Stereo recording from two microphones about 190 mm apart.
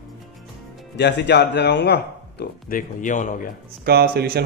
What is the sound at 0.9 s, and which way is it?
Speech, 60° left (ahead or behind).